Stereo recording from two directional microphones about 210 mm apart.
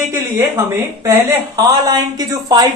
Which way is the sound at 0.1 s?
10° right (ahead or behind).